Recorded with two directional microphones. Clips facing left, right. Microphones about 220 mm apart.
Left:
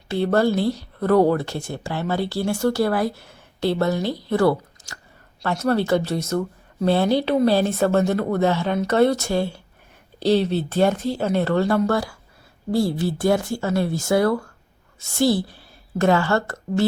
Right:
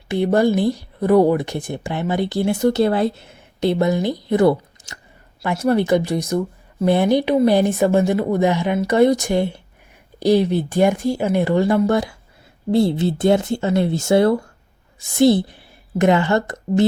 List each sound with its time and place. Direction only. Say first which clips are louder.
0.1 s a woman's voice: right 3 dB; 15° right (ahead or behind)